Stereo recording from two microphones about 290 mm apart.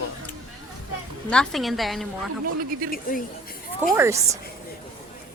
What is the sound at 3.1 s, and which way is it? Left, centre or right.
Speech, left.